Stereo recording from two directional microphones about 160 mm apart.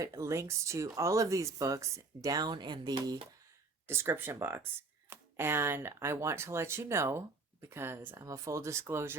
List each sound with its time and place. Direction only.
0.0 s speech: 20° right (ahead or behind)
3.8 s speech: 15° right (ahead or behind)